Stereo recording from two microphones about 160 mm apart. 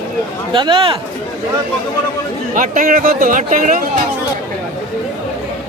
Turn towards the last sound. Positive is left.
turn(degrees=-55)  # may be behind; listen again after turning